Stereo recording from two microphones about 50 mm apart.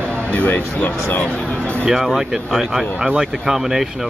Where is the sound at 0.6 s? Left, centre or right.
Left.